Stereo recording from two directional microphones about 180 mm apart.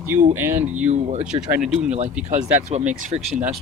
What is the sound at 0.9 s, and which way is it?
Speech, 40° right (ahead or behind).